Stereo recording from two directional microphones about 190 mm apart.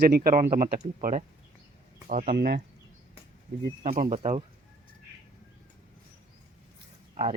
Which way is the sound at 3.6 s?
45° right (ahead or behind).